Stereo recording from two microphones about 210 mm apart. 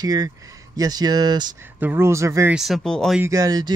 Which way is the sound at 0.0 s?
20° right (ahead or behind).